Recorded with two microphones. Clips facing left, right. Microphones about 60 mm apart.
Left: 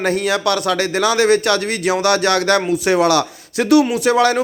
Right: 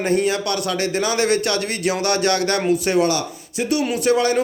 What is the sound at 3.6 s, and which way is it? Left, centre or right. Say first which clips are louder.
Speech: left 5 dB; left.